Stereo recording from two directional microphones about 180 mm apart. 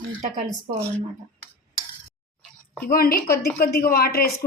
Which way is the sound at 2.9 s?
55° left (ahead or behind).